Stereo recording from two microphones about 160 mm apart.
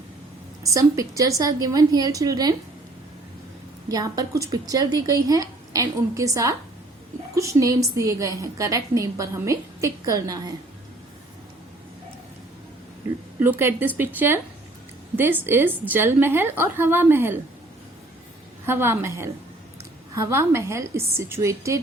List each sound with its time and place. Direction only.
0.6 s a woman's voice: 20° right (ahead or behind)
3.8 s a woman's voice: 25° right (ahead or behind)
13.4 s a woman's voice: 15° right (ahead or behind)
18.6 s a woman's voice: 15° right (ahead or behind)